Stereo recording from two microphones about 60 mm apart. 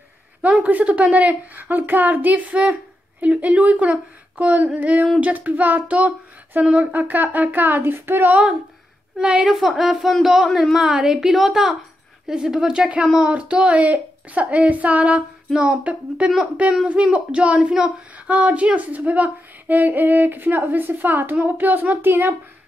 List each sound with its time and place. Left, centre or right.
0.4 s a woman's voice: right
9.2 s a woman's voice: centre; by 22.3 s right